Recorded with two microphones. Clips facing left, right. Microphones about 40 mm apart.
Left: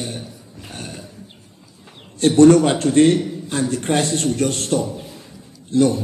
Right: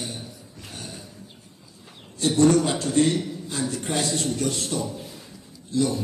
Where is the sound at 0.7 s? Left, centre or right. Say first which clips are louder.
Left 5 dB; left.